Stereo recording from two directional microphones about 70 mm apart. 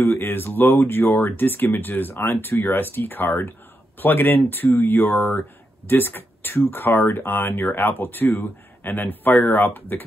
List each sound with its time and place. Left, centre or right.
0.0 s speech: left